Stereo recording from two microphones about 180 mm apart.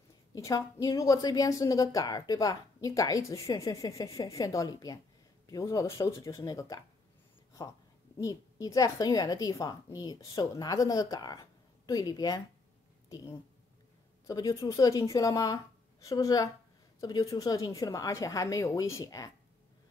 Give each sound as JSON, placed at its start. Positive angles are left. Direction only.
{"t": 0.3, "sound": "a woman's voice", "side_deg": 20}
{"t": 14.2, "sound": "a woman's voice", "side_deg": 20}